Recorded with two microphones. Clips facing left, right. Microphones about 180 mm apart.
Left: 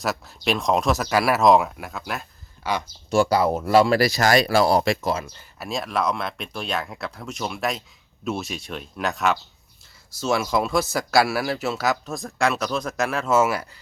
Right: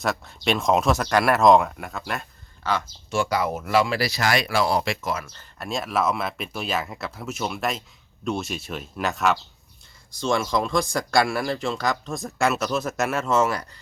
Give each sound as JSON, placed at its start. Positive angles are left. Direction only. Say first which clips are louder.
{"t": 0.0, "sound": "speech", "louder": "even", "side_deg": 0}
{"t": 3.1, "sound": "speech", "louder": "left 5 dB", "side_deg": 35}
{"t": 5.4, "sound": "speech", "louder": "even", "side_deg": 0}